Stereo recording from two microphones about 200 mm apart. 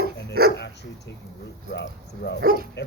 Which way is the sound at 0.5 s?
60° left (ahead or behind).